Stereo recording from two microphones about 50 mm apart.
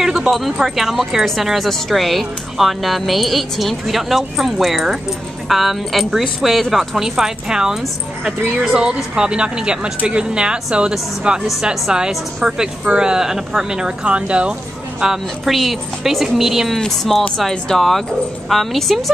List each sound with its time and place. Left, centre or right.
0.6 s speech: centre; by 14.5 s right
15.0 s speech: centre
16.7 s speech: centre